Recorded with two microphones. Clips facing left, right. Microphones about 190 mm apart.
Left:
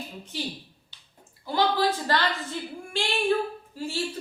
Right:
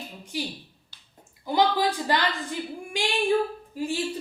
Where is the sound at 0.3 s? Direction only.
10° right (ahead or behind).